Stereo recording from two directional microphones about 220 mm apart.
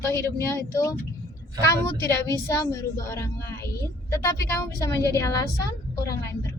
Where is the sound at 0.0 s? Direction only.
10° left (ahead or behind).